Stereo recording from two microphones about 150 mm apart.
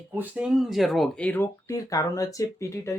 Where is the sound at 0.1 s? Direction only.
10° right (ahead or behind).